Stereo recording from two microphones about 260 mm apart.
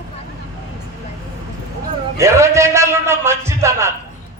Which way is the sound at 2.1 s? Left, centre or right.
Centre.